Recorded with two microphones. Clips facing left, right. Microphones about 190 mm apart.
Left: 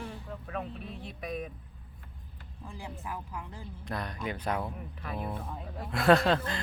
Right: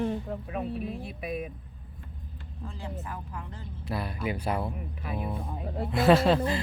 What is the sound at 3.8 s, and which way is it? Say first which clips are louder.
Speech: right 4 dB; 5° right (ahead or behind).